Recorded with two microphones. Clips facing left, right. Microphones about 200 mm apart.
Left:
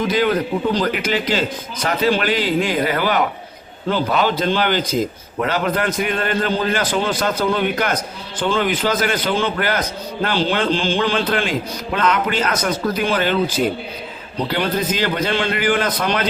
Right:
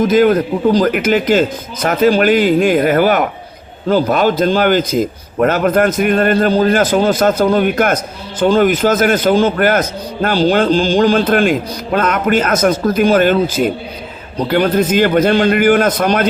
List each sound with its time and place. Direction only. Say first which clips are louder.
0.0 s a man's voice: right 7 dB; 45° right (ahead or behind)
6.3 s a man's voice: right 8 dB; 40° right (ahead or behind)